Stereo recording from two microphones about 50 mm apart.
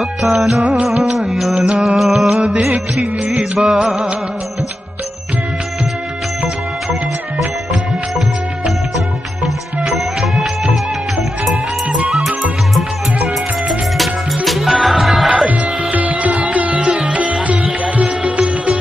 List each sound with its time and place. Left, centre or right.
0.0 s music: centre
3.5 s music: centre
6.4 s music: centre
8.6 s music of bollywood: centre
12.1 s music: centre
15.9 s music: right